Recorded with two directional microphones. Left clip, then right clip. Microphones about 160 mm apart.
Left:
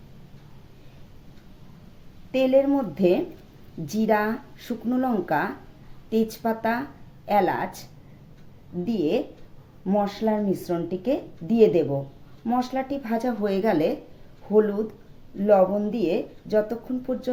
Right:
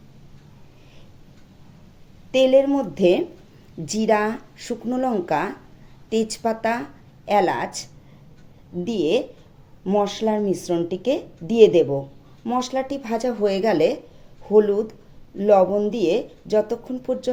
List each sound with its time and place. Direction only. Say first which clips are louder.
2.3 s a woman's voice: right 4 dB; 35° right (ahead or behind)